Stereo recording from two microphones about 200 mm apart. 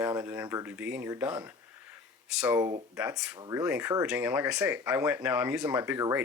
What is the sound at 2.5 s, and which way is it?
Speech, 15° right (ahead or behind).